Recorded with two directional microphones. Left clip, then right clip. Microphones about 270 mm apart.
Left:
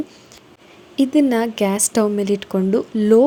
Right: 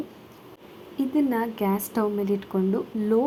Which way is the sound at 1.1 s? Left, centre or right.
Left.